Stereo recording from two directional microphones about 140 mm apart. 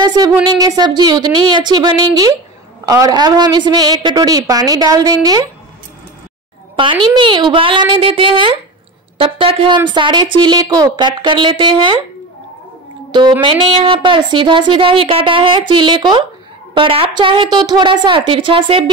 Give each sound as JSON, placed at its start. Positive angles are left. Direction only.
{"t": 0.0, "sound": "a woman's voice", "side_deg": -30}
{"t": 6.8, "sound": "speech", "side_deg": -35}
{"t": 13.1, "sound": "speech", "side_deg": -30}